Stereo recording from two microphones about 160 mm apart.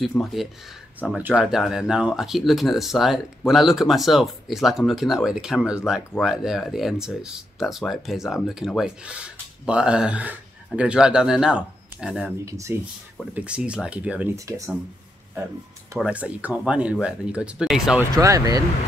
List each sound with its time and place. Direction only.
0.2 s speech: centre (ahead or behind)
12.4 s speech: 20° right (ahead or behind)
13.3 s speech: 5° right (ahead or behind)
16.0 s speech: 10° right (ahead or behind)
18.1 s speech: 20° right (ahead or behind)